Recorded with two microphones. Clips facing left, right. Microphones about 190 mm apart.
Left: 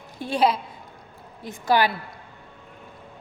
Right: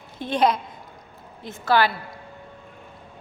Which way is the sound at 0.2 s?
10° left (ahead or behind).